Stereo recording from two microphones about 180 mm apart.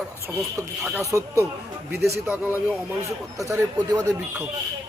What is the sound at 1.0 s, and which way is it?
Speech, 15° right (ahead or behind).